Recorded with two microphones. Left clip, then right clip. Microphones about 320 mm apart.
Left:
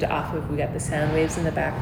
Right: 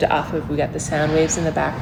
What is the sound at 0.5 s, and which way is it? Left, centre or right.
Speech, right.